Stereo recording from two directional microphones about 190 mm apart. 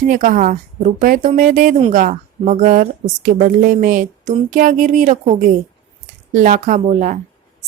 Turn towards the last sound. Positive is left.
turn(degrees=-40)  # may be behind; listen again after turning